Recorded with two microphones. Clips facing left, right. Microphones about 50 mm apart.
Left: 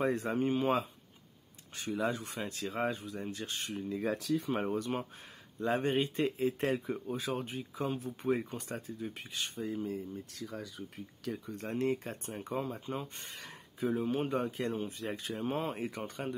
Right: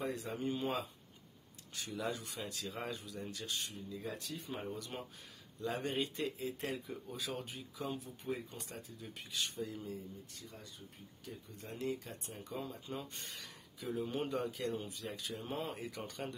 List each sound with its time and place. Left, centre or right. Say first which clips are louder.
0.0 s speech: left 8 dB; left
2.0 s speech: left 6 dB; left
4.0 s speech: left 13 dB; left
4.7 s speech: left 10 dB; left
11.2 s speech: left 11 dB; left
11.6 s speech: left 7 dB; left
14.0 s speech: left 5 dB; centre